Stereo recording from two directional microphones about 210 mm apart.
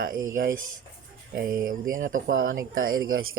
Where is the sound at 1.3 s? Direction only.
45° right (ahead or behind).